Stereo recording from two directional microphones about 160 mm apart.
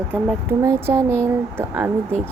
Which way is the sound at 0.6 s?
15° right (ahead or behind).